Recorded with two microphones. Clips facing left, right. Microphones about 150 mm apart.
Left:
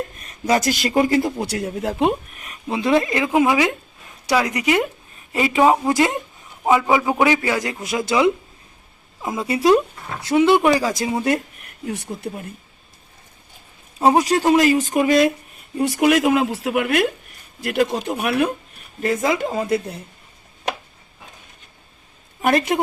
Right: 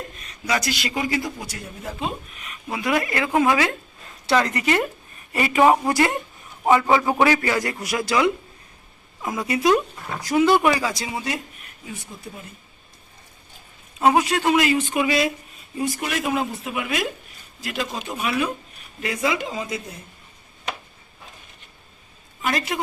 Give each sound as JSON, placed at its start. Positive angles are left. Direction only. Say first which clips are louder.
{"t": 0.2, "sound": "a man's voice", "louder": "left 6 dB", "side_deg": 50}
{"t": 2.6, "sound": "a man's voice", "louder": "left 5 dB", "side_deg": 25}
{"t": 11.9, "sound": "speech", "louder": "left 9 dB", "side_deg": 70}
{"t": 14.0, "sound": "speech", "louder": "left 3 dB", "side_deg": 35}
{"t": 15.8, "sound": "speech", "louder": "left 9 dB", "side_deg": 70}
{"t": 19.0, "sound": "a man's voice", "louder": "left 5 dB", "side_deg": 45}
{"t": 22.4, "sound": "a woman's voice", "louder": "left 7 dB", "side_deg": 55}